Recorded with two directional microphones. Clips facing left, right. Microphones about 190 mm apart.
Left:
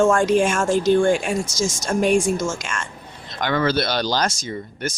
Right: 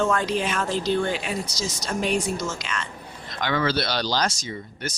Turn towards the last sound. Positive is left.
turn(degrees=50)  # may be behind; listen again after turning